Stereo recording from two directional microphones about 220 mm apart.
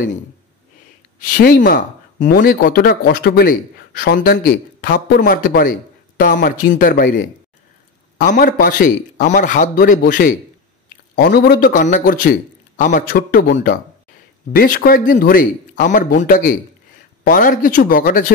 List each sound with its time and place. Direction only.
1.2 s speech: 40° left (ahead or behind)